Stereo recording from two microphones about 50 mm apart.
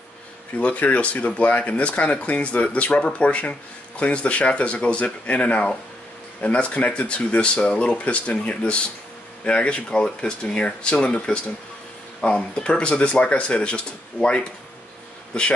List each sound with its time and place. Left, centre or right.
0.6 s speech: left